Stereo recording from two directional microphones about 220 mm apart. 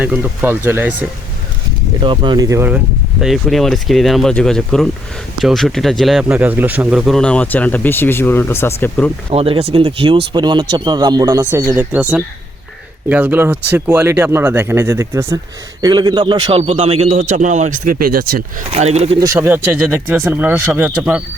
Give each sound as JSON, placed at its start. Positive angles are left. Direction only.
{"t": 0.0, "sound": "speech", "side_deg": -10}
{"t": 2.0, "sound": "speech", "side_deg": -20}
{"t": 9.3, "sound": "a man's voice", "side_deg": -25}
{"t": 18.7, "sound": "a man's voice", "side_deg": -30}
{"t": 19.2, "sound": "speech", "side_deg": -10}